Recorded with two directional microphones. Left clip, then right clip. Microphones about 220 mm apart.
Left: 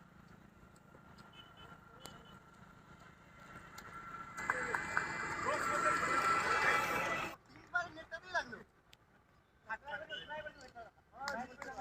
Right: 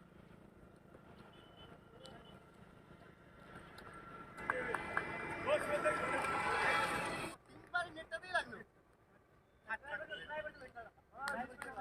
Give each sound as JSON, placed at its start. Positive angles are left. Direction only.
{"t": 3.0, "sound": "vehicle", "side_deg": 40}
{"t": 4.5, "sound": "run", "side_deg": 35}
{"t": 9.6, "sound": "a sound", "side_deg": -10}